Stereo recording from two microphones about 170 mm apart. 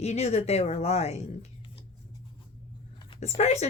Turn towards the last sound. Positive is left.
turn(degrees=40)  # may be behind; listen again after turning